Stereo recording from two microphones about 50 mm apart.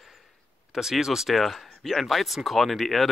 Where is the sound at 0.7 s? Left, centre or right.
Centre.